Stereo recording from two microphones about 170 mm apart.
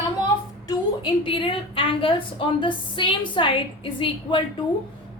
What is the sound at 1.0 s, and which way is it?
A woman's voice, 30° left (ahead or behind).